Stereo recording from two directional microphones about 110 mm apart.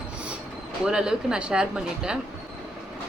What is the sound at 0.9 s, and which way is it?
A woman's voice, 5° right (ahead or behind).